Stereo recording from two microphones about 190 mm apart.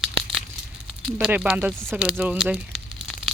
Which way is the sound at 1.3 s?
10° right (ahead or behind).